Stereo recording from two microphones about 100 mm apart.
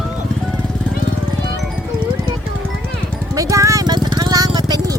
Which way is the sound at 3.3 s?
35° right (ahead or behind).